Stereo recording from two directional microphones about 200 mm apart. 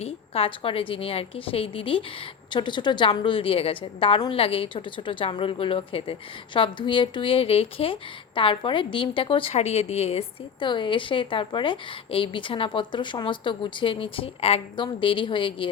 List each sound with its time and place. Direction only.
0.0 s a woman's voice: 30° left (ahead or behind)